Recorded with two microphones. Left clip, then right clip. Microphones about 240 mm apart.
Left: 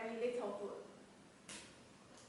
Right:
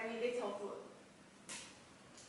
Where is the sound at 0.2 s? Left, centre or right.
Centre.